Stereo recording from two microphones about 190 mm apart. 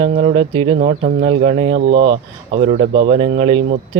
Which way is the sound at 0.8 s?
40° right (ahead or behind).